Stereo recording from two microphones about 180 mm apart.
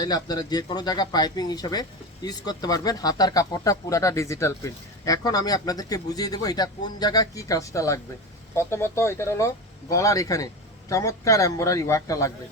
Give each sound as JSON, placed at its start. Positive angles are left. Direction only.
{"t": 0.0, "sound": "speech", "side_deg": 20}